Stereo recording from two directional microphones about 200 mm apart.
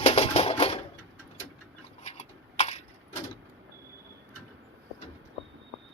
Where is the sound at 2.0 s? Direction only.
35° left (ahead or behind).